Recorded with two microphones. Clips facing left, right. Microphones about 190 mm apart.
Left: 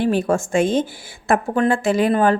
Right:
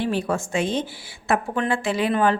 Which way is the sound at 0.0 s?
50° left (ahead or behind).